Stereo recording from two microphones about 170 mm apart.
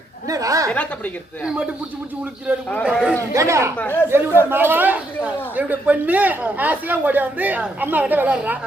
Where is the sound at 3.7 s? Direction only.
10° left (ahead or behind).